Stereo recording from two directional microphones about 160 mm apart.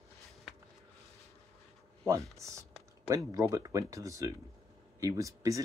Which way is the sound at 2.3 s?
20° right (ahead or behind).